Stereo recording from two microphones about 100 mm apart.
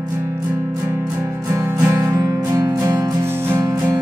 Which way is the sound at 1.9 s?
30° right (ahead or behind).